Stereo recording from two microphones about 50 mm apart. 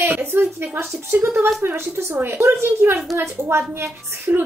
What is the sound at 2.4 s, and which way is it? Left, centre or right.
Speech, right.